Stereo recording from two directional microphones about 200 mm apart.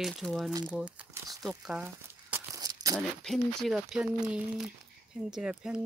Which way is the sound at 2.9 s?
Centre (ahead or behind).